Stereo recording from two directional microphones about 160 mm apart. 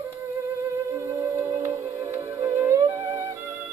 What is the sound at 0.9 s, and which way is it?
Music, 20° right (ahead or behind).